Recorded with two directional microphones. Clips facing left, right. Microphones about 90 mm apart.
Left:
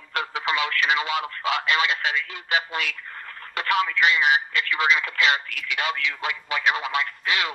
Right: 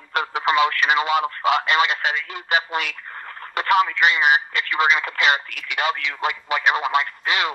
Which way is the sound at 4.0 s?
60° right (ahead or behind).